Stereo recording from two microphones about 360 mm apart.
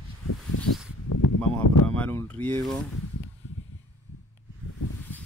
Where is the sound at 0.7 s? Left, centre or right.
Left.